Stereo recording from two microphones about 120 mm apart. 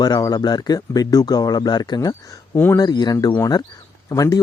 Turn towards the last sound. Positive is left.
turn(degrees=30)  # may be behind; listen again after turning